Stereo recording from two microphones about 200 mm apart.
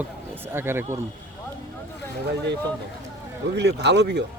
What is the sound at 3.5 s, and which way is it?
Speech, 60° right (ahead or behind).